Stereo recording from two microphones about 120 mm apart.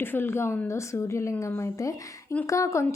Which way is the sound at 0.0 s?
20° left (ahead or behind).